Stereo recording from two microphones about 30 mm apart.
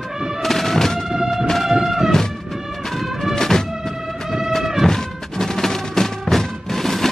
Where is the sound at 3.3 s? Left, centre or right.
Centre.